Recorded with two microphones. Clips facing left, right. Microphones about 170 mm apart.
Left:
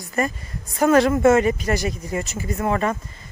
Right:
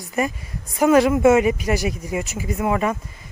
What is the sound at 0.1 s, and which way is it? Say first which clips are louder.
Speech: right 1 dB; 10° right (ahead or behind).